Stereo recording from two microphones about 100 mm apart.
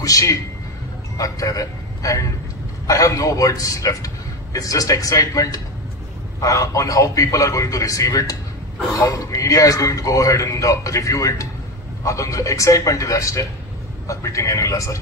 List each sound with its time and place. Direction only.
0.0 s a man's voice: 35° left (ahead or behind)